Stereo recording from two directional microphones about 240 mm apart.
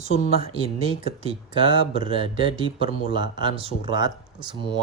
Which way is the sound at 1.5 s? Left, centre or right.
Right.